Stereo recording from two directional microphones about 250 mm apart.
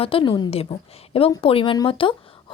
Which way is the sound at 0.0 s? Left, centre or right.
Left.